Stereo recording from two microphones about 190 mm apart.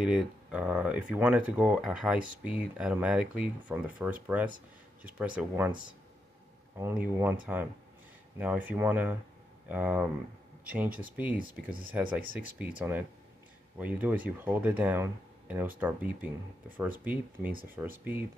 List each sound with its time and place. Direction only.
0.0 s speech: 5° right (ahead or behind)
5.7 s speech: 25° right (ahead or behind)
7.2 s speech: 10° right (ahead or behind)